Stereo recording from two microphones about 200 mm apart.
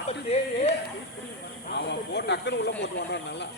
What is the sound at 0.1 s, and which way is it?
Speech, 30° left (ahead or behind).